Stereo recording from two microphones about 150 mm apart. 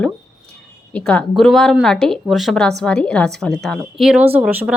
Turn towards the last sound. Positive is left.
turn(degrees=-10)  # may be behind; listen again after turning